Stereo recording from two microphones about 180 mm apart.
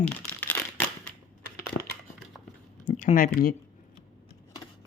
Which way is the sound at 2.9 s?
40° left (ahead or behind).